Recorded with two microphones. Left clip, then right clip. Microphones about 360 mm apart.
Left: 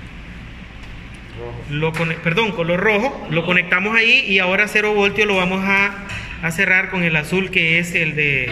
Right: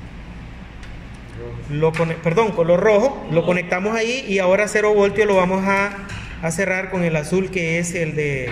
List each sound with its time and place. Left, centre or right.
1.8 s a man's voice: centre